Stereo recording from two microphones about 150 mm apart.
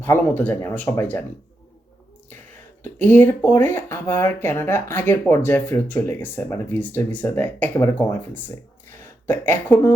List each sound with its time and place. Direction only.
0.0 s speech: 15° left (ahead or behind)
2.8 s speech: 15° left (ahead or behind)